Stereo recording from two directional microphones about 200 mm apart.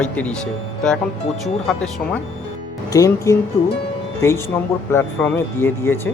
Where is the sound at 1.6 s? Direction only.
5° left (ahead or behind).